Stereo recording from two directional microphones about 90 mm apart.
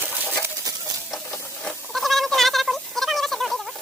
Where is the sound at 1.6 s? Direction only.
Centre (ahead or behind).